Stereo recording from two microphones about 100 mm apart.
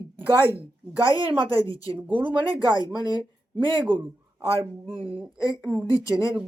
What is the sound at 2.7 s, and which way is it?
Speech, 40° left (ahead or behind).